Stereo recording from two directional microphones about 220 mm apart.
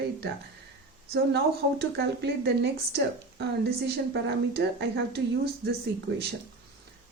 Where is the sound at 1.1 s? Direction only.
50° right (ahead or behind).